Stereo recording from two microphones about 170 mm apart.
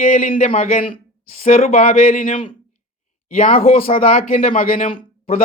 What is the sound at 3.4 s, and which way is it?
Speech, 55° left (ahead or behind).